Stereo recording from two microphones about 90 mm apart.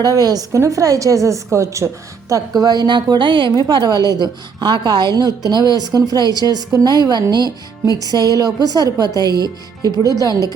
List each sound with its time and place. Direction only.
0.0 s a woman's voice: 45° right (ahead or behind); by 3.5 s 65° right (ahead or behind)
3.5 s a woman's voice: 55° right (ahead or behind)